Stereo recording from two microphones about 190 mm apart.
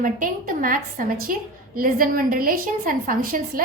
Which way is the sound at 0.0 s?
45° right (ahead or behind).